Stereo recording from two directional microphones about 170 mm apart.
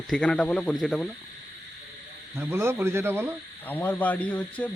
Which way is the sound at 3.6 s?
10° left (ahead or behind).